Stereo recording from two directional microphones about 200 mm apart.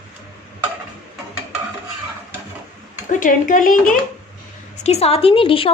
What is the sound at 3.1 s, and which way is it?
Speech, 40° left (ahead or behind).